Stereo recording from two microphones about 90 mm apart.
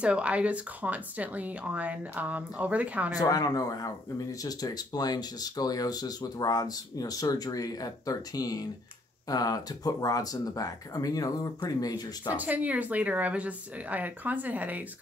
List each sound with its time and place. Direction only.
0.0 s speech: 15° right (ahead or behind)
3.2 s speech: 45° left (ahead or behind)
12.4 s speech: 15° right (ahead or behind)